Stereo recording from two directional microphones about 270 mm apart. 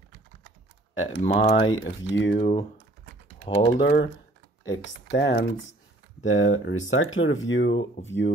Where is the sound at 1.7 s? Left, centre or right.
Left.